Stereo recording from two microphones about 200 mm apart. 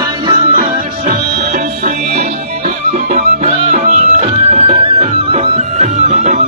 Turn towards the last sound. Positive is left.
turn(degrees=-35)  # may be behind; listen again after turning